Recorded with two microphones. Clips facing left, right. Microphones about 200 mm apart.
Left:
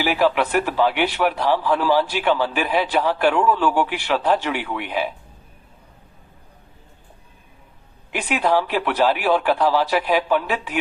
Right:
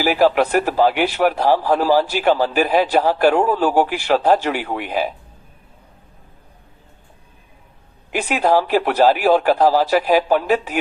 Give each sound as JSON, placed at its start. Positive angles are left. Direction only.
{"t": 0.0, "sound": "a man's voice", "side_deg": -40}
{"t": 8.1, "sound": "a man's voice", "side_deg": -40}